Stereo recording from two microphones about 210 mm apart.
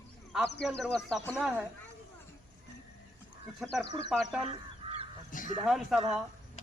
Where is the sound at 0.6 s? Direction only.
Centre (ahead or behind).